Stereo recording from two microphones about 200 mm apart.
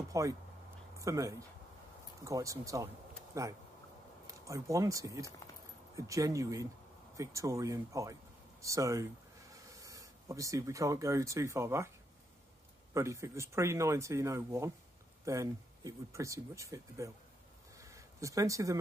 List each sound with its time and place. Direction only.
0.1 s speech: 15° right (ahead or behind)
12.9 s speech: 15° right (ahead or behind)
17.7 s a sound: 15° right (ahead or behind)